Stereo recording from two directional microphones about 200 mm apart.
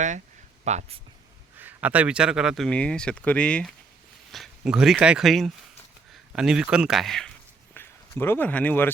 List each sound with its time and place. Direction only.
0.6 s speech: 35° right (ahead or behind)
1.5 s speech: 10° right (ahead or behind); by 8.9 s 10° left (ahead or behind)